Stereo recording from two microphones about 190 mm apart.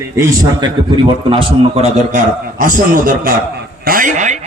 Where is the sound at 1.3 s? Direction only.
30° right (ahead or behind).